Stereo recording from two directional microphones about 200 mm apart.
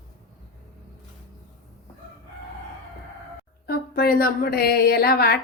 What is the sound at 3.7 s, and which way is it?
Speech, 50° left (ahead or behind).